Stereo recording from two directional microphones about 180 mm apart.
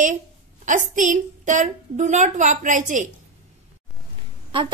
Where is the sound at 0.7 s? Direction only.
45° right (ahead or behind).